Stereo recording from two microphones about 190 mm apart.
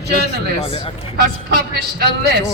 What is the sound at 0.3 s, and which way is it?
Speech, 30° left (ahead or behind).